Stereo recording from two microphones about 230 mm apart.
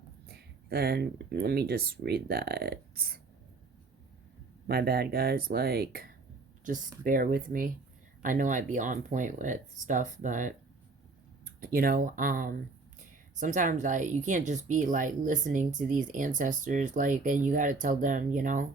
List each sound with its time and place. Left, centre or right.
0.3 s speech: right
4.6 s speech: right